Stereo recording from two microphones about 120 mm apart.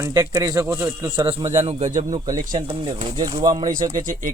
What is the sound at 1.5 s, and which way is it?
Speech, 70° right (ahead or behind).